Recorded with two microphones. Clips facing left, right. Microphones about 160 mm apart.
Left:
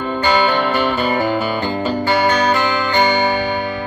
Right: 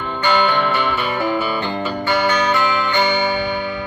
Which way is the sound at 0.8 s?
35° left (ahead or behind).